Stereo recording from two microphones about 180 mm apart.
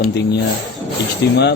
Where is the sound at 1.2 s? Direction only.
75° left (ahead or behind).